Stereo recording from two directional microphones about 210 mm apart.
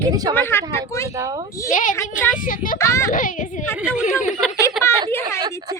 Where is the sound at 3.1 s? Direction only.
40° left (ahead or behind).